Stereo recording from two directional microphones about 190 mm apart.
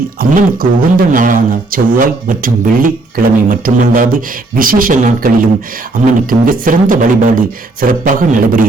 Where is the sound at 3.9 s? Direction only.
45° right (ahead or behind).